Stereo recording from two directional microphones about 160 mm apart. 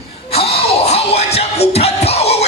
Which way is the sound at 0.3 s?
40° left (ahead or behind).